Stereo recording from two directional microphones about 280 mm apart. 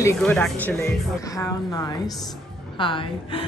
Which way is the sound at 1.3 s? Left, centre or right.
Centre.